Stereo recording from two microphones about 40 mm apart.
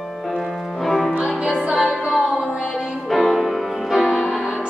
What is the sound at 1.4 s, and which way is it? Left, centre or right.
Music, right.